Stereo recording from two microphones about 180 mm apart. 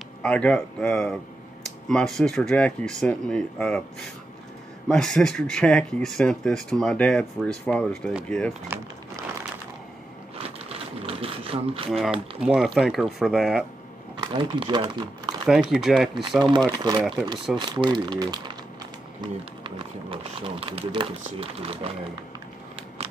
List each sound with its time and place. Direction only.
0.2 s speech: 5° left (ahead or behind)
8.6 s speech: 15° right (ahead or behind)
10.3 s typewriter: 30° right (ahead or behind)
11.9 s speech: centre (ahead or behind)
14.1 s speech: 25° right (ahead or behind)
15.4 s speech: centre (ahead or behind)
16.2 s speech: 25° right (ahead or behind)